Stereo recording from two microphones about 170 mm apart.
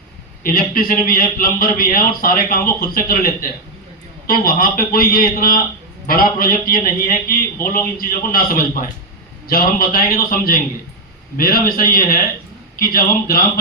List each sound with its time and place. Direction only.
0.4 s speech: 55° left (ahead or behind)
4.3 s speech: 60° left (ahead or behind)